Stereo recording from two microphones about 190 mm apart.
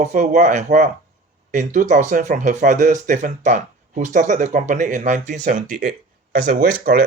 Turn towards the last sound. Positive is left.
turn(degrees=-50)  # may be behind; listen again after turning